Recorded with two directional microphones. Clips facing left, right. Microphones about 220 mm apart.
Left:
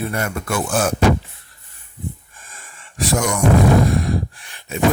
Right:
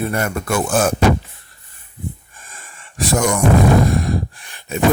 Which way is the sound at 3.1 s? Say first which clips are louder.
Right 3 dB; 50° right (ahead or behind).